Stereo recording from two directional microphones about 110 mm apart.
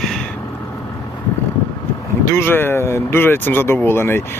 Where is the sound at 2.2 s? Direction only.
20° left (ahead or behind).